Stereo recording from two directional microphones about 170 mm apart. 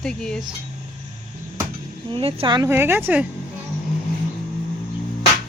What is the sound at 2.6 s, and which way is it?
Speech, 15° right (ahead or behind).